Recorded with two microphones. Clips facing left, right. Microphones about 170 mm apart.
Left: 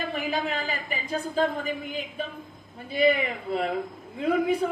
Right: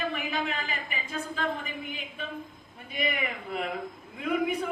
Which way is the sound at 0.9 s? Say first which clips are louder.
Left 5 dB; 35° left (ahead or behind).